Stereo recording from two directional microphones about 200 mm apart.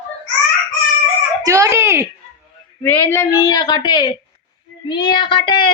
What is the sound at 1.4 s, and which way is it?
Speech, 15° right (ahead or behind).